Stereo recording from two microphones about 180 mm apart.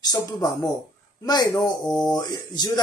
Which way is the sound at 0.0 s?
20° left (ahead or behind).